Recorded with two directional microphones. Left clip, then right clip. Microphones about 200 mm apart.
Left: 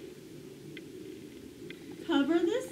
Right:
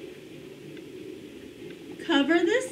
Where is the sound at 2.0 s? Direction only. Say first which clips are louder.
Right 5 dB; 25° right (ahead or behind).